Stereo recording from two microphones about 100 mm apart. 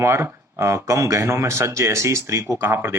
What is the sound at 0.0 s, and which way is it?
Speech, 30° right (ahead or behind).